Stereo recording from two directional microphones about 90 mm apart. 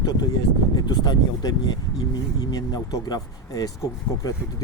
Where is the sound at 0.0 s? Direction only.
50° left (ahead or behind).